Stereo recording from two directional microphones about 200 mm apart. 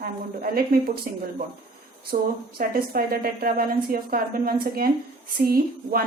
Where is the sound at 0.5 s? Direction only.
45° right (ahead or behind).